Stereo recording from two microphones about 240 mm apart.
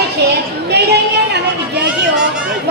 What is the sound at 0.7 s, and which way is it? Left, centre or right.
Chatter, right.